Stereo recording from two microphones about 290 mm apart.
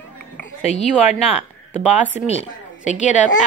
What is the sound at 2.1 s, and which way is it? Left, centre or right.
A woman's voice, left.